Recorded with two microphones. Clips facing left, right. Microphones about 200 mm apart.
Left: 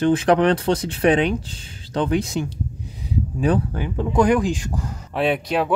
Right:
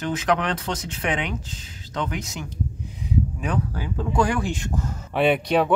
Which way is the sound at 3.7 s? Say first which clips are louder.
Left 4 dB; 20° left (ahead or behind).